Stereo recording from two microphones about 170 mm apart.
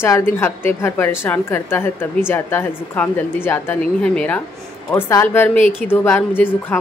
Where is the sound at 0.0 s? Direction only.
15° left (ahead or behind).